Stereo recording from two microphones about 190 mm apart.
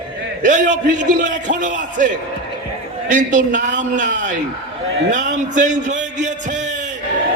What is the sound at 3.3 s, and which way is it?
A man's voice, 40° right (ahead or behind).